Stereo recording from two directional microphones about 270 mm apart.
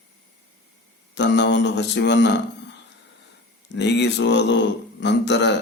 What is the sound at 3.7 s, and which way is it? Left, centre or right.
Speech, left.